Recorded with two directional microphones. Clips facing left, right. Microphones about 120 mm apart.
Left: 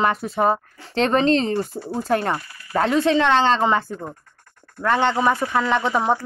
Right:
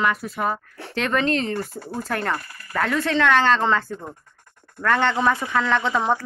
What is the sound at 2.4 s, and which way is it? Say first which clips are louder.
Speech: even; 45° right (ahead or behind).